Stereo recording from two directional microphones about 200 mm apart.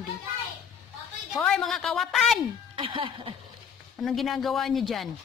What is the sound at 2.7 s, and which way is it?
Speech, 25° right (ahead or behind).